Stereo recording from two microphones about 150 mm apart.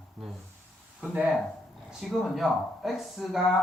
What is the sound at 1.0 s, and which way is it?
Speech, 5° right (ahead or behind).